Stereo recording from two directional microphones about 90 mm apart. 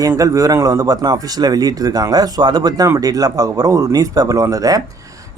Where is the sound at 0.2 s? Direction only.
40° right (ahead or behind).